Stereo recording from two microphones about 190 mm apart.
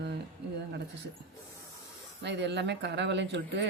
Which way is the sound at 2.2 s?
65° right (ahead or behind).